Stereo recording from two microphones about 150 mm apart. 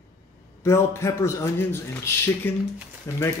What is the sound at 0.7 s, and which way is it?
Speech, 15° left (ahead or behind).